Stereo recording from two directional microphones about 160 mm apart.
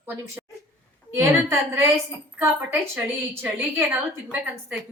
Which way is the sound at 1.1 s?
15° right (ahead or behind).